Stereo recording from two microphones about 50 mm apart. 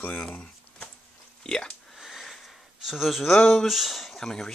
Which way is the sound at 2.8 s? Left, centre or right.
Centre.